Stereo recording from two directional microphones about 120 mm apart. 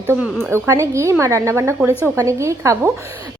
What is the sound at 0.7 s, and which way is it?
A woman's voice, 25° right (ahead or behind).